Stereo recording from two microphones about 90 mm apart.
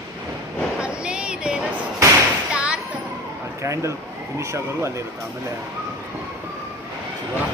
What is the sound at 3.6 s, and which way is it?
Speech, 35° right (ahead or behind).